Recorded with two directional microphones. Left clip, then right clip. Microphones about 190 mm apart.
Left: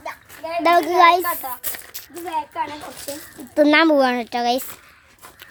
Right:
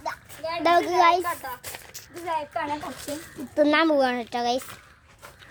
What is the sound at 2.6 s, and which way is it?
Speech, 10° left (ahead or behind).